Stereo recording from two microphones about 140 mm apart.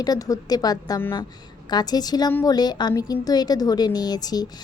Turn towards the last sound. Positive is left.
turn(degrees=25)  # may be behind; listen again after turning